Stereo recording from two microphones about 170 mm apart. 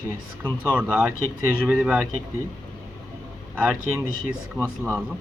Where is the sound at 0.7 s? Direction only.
5° right (ahead or behind).